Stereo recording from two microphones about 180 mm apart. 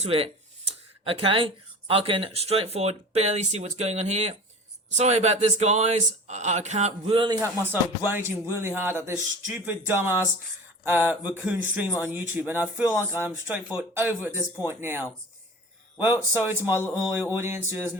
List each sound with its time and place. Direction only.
0.0 s speech: 30° right (ahead or behind)
7.4 s a man's voice: 10° right (ahead or behind)